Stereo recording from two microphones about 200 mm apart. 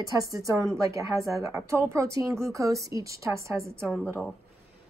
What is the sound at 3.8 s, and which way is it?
Speech, 5° left (ahead or behind).